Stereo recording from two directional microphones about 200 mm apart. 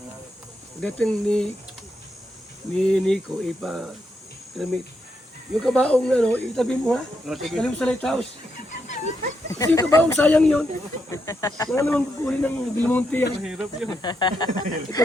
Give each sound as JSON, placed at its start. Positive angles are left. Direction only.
{"t": 0.8, "sound": "speech", "side_deg": 5}
{"t": 2.7, "sound": "speech", "side_deg": 5}
{"t": 9.5, "sound": "speech", "side_deg": 15}
{"t": 11.1, "sound": "speech", "side_deg": 15}
{"t": 13.4, "sound": "speech", "side_deg": 0}
{"t": 13.9, "sound": "speech", "side_deg": 20}